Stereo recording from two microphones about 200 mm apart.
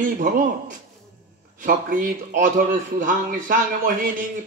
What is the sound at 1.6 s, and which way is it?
Speech, 40° right (ahead or behind).